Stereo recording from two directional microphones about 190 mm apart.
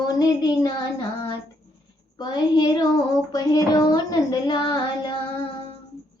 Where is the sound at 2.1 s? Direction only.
20° left (ahead or behind).